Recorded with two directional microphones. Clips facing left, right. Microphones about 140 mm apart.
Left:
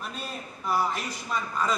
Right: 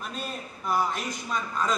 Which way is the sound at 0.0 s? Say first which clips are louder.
Right 1 dB; centre (ahead or behind).